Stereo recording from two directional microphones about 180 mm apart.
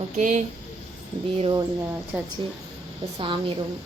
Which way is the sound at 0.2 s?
45° right (ahead or behind).